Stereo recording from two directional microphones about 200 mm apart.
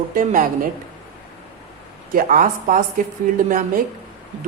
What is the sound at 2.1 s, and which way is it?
Speech, 45° right (ahead or behind).